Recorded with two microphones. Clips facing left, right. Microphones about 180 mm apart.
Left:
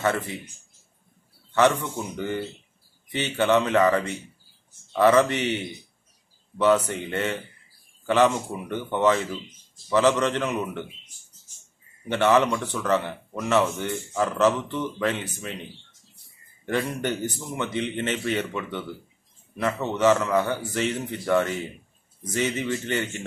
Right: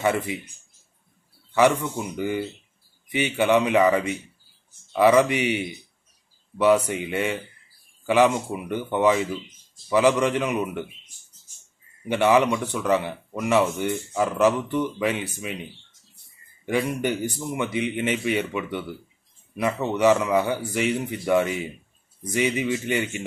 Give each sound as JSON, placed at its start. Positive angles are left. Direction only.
{"t": 0.0, "sound": "speech", "side_deg": -15}
{"t": 1.5, "sound": "speech", "side_deg": -10}
{"t": 12.1, "sound": "speech", "side_deg": -10}
{"t": 16.6, "sound": "speech", "side_deg": -10}